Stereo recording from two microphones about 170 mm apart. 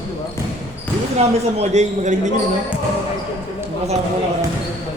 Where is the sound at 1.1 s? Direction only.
40° right (ahead or behind).